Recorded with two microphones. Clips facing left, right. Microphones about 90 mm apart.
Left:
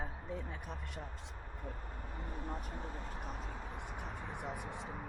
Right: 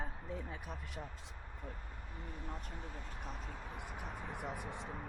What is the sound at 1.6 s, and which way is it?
Speech, 40° left (ahead or behind).